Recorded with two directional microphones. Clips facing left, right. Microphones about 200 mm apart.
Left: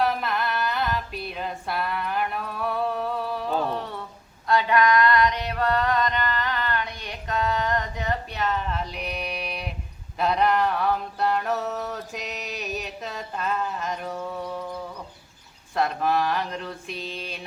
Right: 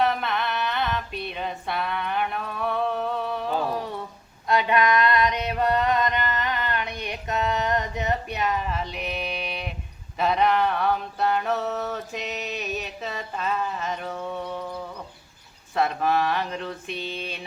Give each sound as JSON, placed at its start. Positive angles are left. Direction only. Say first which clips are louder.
{"t": 0.0, "sound": "music", "louder": "right 1 dB", "side_deg": 0}
{"t": 4.4, "sound": "a sound", "louder": "left 1 dB", "side_deg": -20}
{"t": 10.2, "sound": "mantra", "louder": "even", "side_deg": 0}
{"t": 15.7, "sound": "mantra", "louder": "right 1 dB", "side_deg": 0}